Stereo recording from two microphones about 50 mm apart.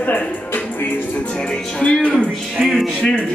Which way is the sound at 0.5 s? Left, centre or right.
Left.